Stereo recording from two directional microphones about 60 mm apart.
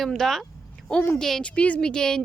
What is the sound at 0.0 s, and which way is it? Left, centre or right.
A woman's voice, centre.